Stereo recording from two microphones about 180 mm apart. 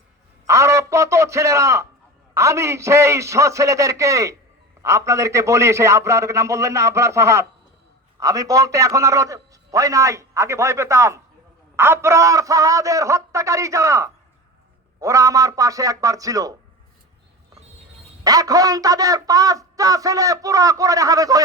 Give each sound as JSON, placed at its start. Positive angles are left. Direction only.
{"t": 0.4, "sound": "a man's voice", "side_deg": -15}
{"t": 18.2, "sound": "a man's voice", "side_deg": -20}